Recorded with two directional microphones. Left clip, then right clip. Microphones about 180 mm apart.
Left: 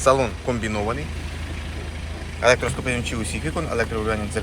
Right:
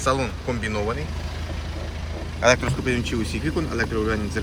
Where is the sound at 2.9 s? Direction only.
Centre (ahead or behind).